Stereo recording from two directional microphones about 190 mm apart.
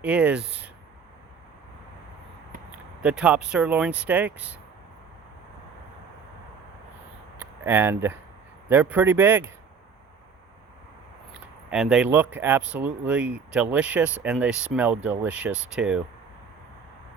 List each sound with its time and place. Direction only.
0.0 s speech: 5° right (ahead or behind)
2.7 s speech: 5° right (ahead or behind)
7.3 s speech: 10° right (ahead or behind)
11.7 s speech: 5° right (ahead or behind)